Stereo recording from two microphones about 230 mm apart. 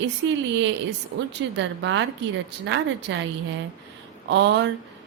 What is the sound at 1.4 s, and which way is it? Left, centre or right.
A woman's voice, right.